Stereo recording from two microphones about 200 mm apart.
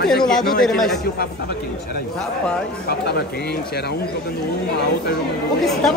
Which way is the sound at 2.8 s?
55° left (ahead or behind).